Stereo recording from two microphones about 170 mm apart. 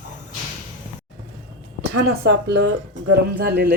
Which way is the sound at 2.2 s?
85° right.